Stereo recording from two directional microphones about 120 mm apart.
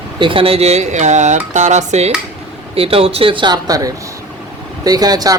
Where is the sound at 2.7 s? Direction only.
55° right (ahead or behind).